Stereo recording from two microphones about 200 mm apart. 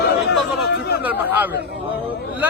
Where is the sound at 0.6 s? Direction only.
55° left (ahead or behind).